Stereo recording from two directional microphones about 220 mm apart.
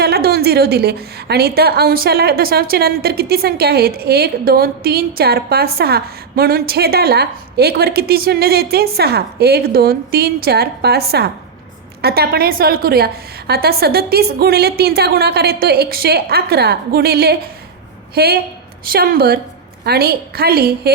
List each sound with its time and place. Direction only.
0.0 s a woman's voice: 45° right (ahead or behind)